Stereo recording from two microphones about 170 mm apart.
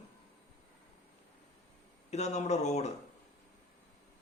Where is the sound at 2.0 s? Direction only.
40° left (ahead or behind).